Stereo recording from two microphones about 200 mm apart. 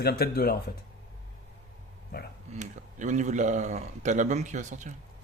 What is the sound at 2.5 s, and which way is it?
Speech, 35° right (ahead or behind).